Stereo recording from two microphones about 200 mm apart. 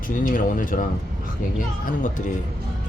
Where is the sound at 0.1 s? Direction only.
45° left (ahead or behind).